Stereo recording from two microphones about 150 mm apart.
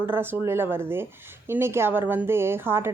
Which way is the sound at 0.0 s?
15° right (ahead or behind).